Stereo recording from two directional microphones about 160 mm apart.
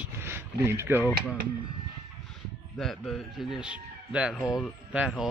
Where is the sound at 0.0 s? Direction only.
15° right (ahead or behind).